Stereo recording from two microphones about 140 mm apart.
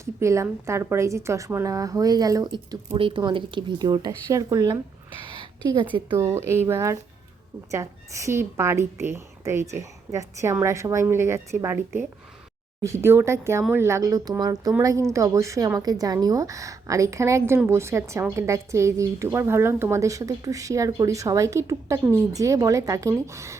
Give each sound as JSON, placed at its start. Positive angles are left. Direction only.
{"t": 0.0, "sound": "a woman's voice", "side_deg": -20}
{"t": 5.2, "sound": "a sound", "side_deg": -35}
{"t": 5.6, "sound": "a woman's voice", "side_deg": -35}
{"t": 6.1, "sound": "a woman's voice", "side_deg": -20}